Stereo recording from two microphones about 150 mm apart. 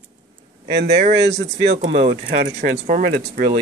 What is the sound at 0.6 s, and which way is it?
Speech, 90° right.